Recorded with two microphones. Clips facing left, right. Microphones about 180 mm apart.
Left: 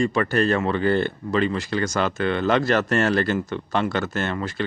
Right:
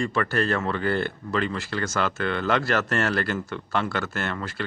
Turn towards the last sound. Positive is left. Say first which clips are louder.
# left 4 dB
turn(degrees=20)  # may be behind; listen again after turning